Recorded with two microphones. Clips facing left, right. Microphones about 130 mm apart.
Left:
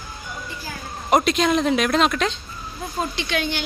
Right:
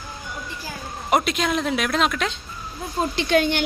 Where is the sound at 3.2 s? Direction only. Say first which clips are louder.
Right 9 dB; 40° right (ahead or behind).